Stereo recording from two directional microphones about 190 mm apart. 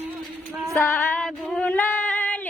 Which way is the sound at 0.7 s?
10° left (ahead or behind).